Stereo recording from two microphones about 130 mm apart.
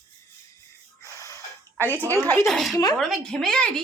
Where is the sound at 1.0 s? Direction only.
25° left (ahead or behind).